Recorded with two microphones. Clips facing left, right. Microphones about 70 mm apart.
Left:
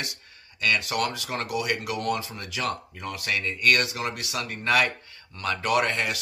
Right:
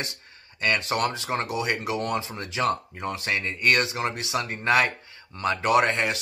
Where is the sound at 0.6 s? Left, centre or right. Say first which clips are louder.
Right 1 dB; right.